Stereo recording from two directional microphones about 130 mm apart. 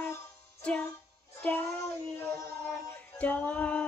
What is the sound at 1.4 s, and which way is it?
Music, 15° left (ahead or behind).